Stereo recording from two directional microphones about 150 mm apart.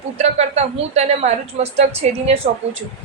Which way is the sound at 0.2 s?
45° right (ahead or behind).